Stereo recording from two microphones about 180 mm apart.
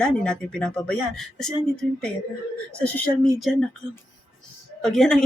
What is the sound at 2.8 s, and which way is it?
Speech, 5° left (ahead or behind).